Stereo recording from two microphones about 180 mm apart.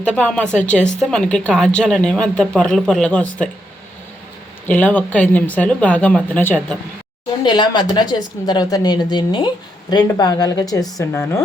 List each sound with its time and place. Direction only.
0.0 s a woman's voice: 5° left (ahead or behind)
4.7 s speech: 10° left (ahead or behind)
7.4 s a woman's voice: 25° left (ahead or behind)